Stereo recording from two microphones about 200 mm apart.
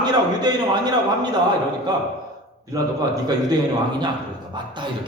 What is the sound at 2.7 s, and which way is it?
Speech, 20° right (ahead or behind).